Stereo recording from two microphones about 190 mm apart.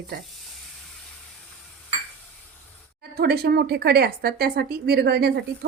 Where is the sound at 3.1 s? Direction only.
55° right (ahead or behind).